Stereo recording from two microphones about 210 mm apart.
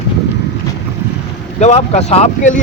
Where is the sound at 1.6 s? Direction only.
30° left (ahead or behind).